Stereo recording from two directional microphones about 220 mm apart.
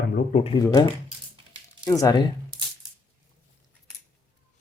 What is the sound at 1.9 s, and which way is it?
Speech, 15° left (ahead or behind).